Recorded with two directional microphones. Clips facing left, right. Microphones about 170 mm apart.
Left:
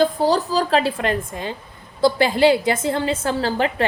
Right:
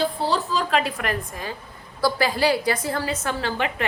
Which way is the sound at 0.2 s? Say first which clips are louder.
Left 5 dB; 40° left (ahead or behind).